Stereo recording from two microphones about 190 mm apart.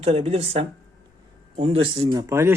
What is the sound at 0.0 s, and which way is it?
A woman's voice, 30° right (ahead or behind).